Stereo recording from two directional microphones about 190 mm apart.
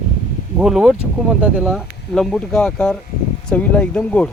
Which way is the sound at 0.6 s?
5° right (ahead or behind).